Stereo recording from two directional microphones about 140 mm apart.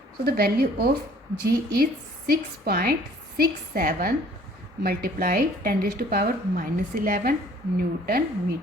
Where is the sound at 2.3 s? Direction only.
90° right.